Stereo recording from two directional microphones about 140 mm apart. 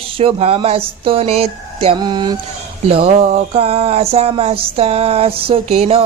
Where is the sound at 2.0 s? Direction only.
30° right (ahead or behind).